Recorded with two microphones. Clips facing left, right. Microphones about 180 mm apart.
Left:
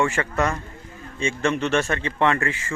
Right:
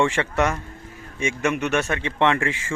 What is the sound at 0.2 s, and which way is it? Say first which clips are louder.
Speech: right 1 dB; 10° right (ahead or behind).